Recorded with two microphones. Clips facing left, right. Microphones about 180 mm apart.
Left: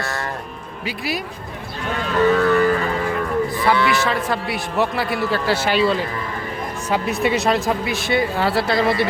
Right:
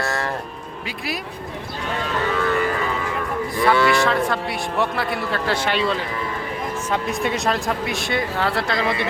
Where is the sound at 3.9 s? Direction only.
Centre (ahead or behind).